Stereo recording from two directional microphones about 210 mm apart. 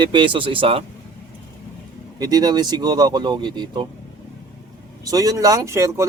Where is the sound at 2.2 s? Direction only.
20° right (ahead or behind).